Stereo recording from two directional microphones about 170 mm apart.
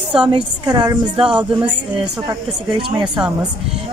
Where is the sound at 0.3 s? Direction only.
25° right (ahead or behind).